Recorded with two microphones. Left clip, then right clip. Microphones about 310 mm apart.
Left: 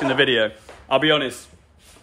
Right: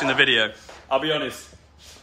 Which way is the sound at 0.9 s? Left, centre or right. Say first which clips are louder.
Left 5 dB; left.